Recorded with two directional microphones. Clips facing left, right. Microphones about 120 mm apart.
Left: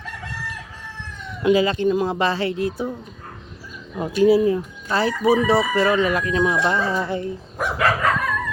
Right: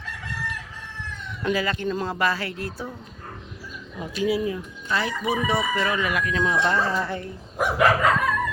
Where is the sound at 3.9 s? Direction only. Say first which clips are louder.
Left 9 dB; 45° left (ahead or behind).